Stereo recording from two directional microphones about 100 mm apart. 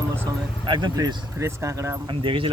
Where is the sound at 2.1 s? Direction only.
60° right (ahead or behind).